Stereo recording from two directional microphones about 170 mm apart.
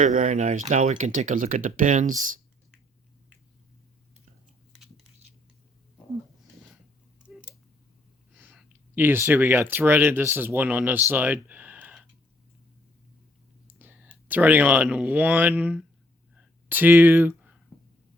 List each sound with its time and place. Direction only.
0.0 s speech: 50° right (ahead or behind)
8.4 s speech: 10° right (ahead or behind)
11.1 s a sound: 10° right (ahead or behind)
13.7 s whispering: 10° right (ahead or behind)
14.3 s speech: 10° right (ahead or behind)